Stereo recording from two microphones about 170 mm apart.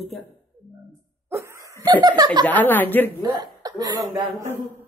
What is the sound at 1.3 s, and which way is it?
Laughter, 15° right (ahead or behind).